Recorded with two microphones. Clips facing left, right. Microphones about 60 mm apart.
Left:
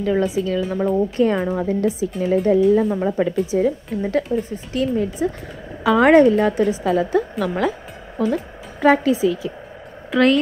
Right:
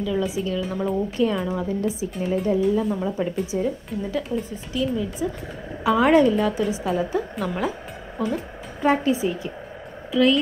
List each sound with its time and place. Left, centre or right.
0.0 s a woman's voice: left
0.4 s a woman's voice: left
1.1 s a woman's voice: left
1.8 s speech: left
2.4 s a woman's voice: left
10.1 s a woman's voice: left